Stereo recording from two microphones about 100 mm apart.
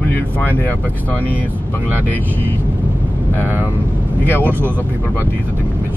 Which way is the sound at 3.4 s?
20° right (ahead or behind).